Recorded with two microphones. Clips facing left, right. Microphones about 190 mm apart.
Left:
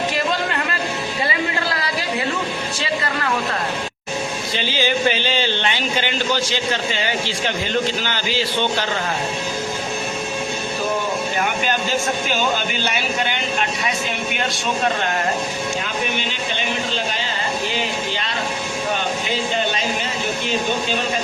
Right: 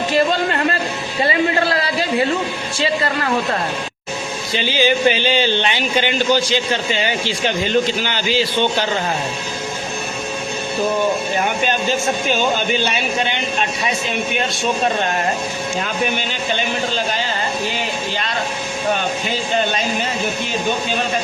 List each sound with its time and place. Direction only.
4.5 s speech: 15° right (ahead or behind)